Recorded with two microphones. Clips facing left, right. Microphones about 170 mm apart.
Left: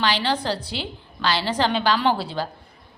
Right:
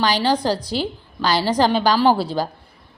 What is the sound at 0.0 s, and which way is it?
A woman's voice, 40° right (ahead or behind).